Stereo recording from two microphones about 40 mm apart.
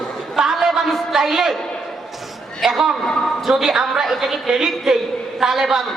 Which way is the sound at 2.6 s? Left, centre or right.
Centre.